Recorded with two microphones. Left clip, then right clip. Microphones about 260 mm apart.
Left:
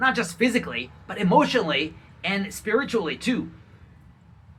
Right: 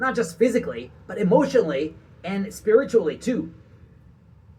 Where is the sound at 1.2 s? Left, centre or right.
Centre.